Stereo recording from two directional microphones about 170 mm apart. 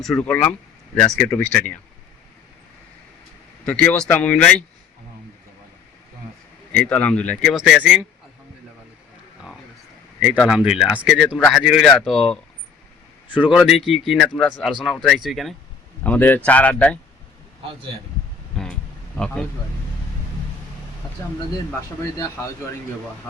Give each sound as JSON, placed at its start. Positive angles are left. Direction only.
{"t": 0.0, "sound": "speech", "side_deg": 5}
{"t": 3.6, "sound": "speech", "side_deg": 5}
{"t": 6.7, "sound": "speech", "side_deg": 5}
{"t": 10.3, "sound": "speech", "side_deg": 0}
{"t": 16.0, "sound": "speech", "side_deg": 10}
{"t": 19.1, "sound": "speech", "side_deg": 5}